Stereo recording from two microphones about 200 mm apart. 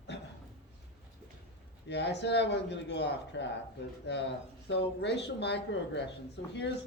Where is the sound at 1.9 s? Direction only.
60° left (ahead or behind).